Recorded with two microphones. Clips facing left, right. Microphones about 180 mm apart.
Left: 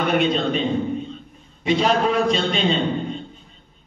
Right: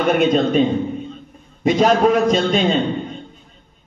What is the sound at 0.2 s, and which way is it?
A man's voice, 45° right (ahead or behind).